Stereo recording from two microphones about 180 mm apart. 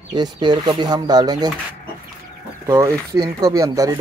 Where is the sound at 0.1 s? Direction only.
25° right (ahead or behind).